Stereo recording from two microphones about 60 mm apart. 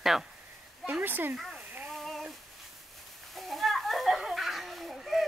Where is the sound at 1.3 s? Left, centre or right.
Centre.